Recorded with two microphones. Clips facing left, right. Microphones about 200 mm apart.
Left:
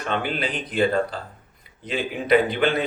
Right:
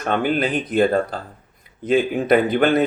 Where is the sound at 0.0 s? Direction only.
50° right (ahead or behind).